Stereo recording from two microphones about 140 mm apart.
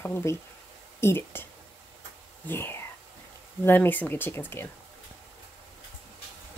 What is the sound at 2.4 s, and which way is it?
Speech, 15° left (ahead or behind).